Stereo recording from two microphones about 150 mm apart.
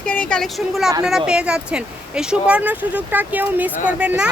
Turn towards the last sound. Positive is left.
turn(degrees=-5)  # may be behind; listen again after turning